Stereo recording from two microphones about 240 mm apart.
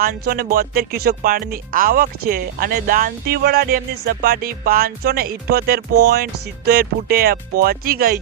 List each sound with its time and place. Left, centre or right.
0.0 s music: right